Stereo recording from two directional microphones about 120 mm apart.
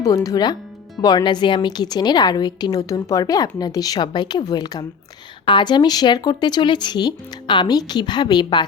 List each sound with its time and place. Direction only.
0.0 s a woman's voice: 30° left (ahead or behind)